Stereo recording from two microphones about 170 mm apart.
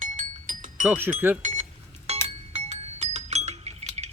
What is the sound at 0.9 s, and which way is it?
Speech, 10° right (ahead or behind).